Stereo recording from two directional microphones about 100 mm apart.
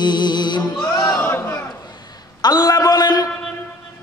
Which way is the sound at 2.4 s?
40° left (ahead or behind).